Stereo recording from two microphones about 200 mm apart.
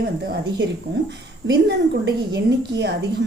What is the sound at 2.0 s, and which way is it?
Speech, 60° right (ahead or behind).